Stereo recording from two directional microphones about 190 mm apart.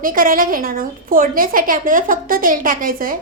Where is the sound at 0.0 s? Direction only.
45° right (ahead or behind).